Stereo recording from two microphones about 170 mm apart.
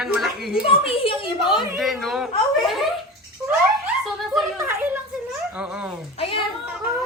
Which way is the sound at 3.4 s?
10° right (ahead or behind).